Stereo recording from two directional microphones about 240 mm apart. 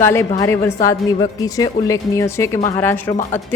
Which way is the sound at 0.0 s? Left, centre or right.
Centre.